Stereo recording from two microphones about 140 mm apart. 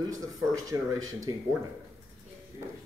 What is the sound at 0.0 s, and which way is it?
Speech, 25° right (ahead or behind).